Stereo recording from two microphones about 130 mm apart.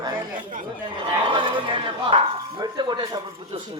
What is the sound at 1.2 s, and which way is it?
Speech, 40° right (ahead or behind).